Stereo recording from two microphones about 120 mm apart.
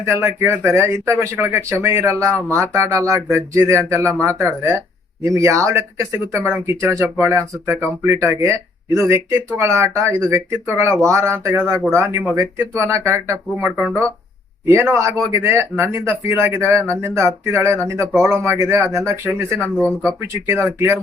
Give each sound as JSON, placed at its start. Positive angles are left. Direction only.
{"t": 0.0, "sound": "speech", "side_deg": -20}
{"t": 19.6, "sound": "speech", "side_deg": 10}
{"t": 20.7, "sound": "speech", "side_deg": -20}